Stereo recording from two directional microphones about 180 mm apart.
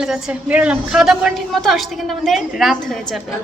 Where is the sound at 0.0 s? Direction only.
5° right (ahead or behind).